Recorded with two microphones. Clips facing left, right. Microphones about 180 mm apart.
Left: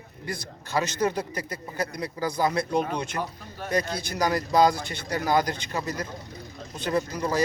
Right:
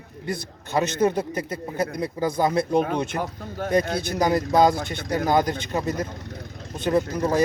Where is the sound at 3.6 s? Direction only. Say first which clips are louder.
Right 5 dB; 55° right (ahead or behind).